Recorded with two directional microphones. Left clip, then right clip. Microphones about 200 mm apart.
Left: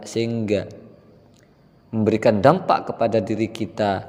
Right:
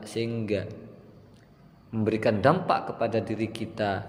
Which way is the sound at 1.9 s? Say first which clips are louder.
Left 7 dB; 35° left (ahead or behind).